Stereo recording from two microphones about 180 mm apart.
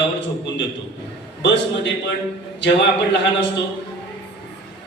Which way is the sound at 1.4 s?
75° left (ahead or behind).